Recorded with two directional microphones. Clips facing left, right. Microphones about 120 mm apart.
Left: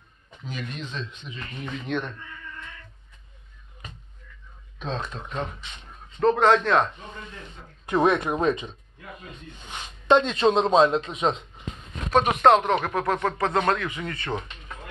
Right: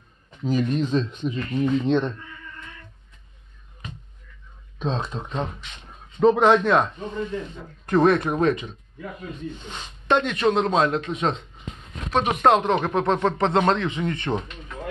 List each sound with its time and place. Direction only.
0.4 s speech: 40° right (ahead or behind)
4.7 s speech: 30° right (ahead or behind)
6.1 s a man's voice: 5° right (ahead or behind)
7.8 s speech: 5° left (ahead or behind)
8.3 s speech: 15° left (ahead or behind)
10.0 s speech: 25° left (ahead or behind)
12.2 s speech: 15° right (ahead or behind)